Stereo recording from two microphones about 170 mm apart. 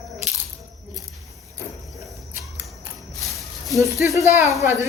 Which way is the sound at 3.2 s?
Centre (ahead or behind).